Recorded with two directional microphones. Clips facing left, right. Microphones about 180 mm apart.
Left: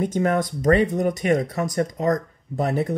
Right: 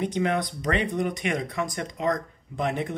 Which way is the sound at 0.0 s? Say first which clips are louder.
Left 4 dB; 45° left (ahead or behind).